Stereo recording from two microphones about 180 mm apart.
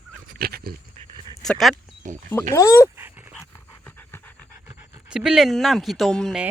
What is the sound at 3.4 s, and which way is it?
Dog, 15° left (ahead or behind).